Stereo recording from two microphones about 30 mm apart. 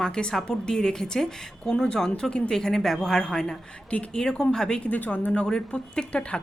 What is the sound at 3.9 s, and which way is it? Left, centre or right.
Speech, left.